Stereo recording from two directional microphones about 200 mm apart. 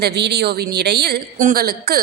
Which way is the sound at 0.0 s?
55° right (ahead or behind).